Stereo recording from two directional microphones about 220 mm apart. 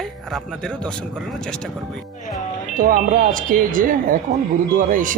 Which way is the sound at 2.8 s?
40° right (ahead or behind).